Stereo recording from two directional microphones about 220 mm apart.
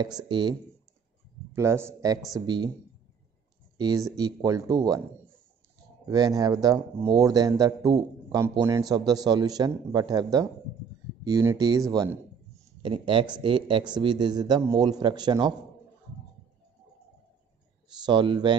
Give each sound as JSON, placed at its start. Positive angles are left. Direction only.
{"t": 0.2, "sound": "a man's voice", "side_deg": -20}
{"t": 3.7, "sound": "a man's voice", "side_deg": -15}
{"t": 6.0, "sound": "a man's voice", "side_deg": -15}
{"t": 18.0, "sound": "a man's voice", "side_deg": -20}